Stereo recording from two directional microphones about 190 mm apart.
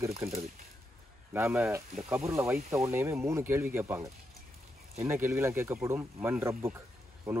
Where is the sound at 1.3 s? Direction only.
10° right (ahead or behind).